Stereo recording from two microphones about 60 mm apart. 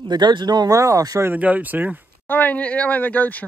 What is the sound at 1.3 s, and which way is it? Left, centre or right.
Speech, right.